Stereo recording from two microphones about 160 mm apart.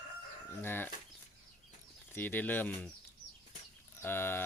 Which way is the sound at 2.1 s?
10° left (ahead or behind).